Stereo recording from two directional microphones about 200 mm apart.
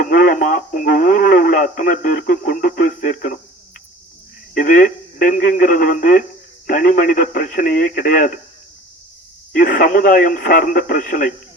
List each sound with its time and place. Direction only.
0.0 s speech: 45° left (ahead or behind)
4.5 s speech: 45° left (ahead or behind)
9.5 s speech: 45° left (ahead or behind)